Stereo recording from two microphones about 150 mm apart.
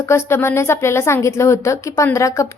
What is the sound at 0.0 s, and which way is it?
A woman's voice, 20° left (ahead or behind).